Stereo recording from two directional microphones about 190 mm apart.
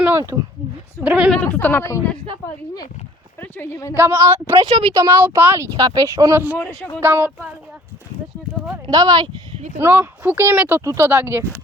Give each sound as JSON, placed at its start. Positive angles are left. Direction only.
{"t": 0.0, "sound": "a sound", "side_deg": -15}
{"t": 1.0, "sound": "a woman's voice", "side_deg": -5}
{"t": 1.4, "sound": "a woman's voice", "side_deg": 10}
{"t": 3.4, "sound": "a woman's voice", "side_deg": 10}
{"t": 3.9, "sound": "speech", "side_deg": -10}
{"t": 4.5, "sound": "speech", "side_deg": -25}
{"t": 6.6, "sound": "a woman's voice", "side_deg": 15}
{"t": 7.0, "sound": "speech", "side_deg": -10}
{"t": 8.9, "sound": "speech", "side_deg": -20}